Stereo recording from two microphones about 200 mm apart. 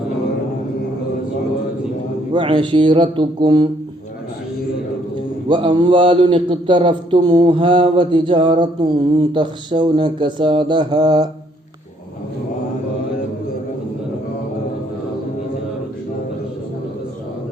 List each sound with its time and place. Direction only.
2.3 s a man's voice: 25° right (ahead or behind)
5.5 s a man's voice: 25° right (ahead or behind)